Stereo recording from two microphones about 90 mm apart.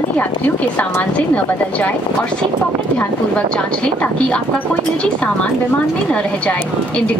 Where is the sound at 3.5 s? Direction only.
10° left (ahead or behind).